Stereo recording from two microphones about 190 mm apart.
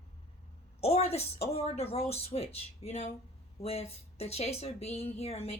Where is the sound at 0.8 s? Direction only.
35° left (ahead or behind).